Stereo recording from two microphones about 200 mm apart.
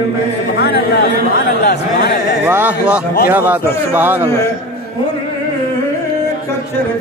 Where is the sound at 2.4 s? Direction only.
10° right (ahead or behind).